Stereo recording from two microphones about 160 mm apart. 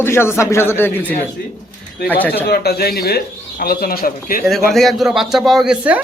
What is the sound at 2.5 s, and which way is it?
A man's voice, 75° left (ahead or behind).